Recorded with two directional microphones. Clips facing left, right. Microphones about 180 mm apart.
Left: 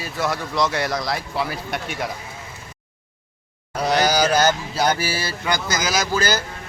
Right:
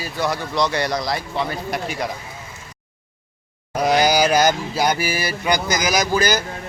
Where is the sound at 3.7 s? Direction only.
10° right (ahead or behind).